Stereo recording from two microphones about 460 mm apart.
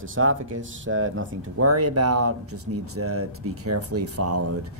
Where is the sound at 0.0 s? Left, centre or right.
Right.